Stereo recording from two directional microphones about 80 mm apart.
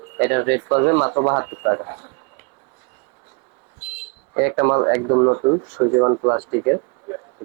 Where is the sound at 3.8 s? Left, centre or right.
Centre.